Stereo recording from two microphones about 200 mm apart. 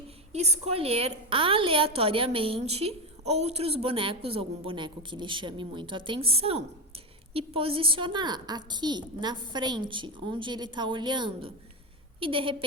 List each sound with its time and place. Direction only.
0.3 s a woman's voice: 30° right (ahead or behind)